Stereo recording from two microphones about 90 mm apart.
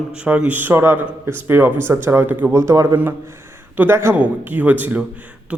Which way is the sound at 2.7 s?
35° right (ahead or behind).